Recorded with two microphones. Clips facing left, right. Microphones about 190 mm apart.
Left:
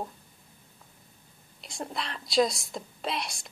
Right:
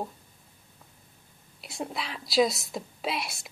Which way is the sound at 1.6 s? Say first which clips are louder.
Right 1 dB; 5° right (ahead or behind).